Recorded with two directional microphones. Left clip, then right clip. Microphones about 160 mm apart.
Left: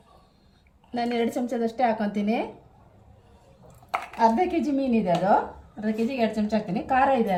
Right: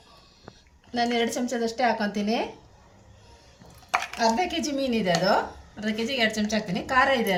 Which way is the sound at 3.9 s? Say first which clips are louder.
Left 2 dB; 10° right (ahead or behind).